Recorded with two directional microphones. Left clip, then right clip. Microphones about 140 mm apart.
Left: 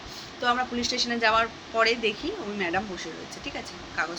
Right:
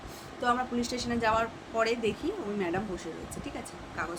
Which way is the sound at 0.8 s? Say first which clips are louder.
Left 6 dB; 20° right (ahead or behind).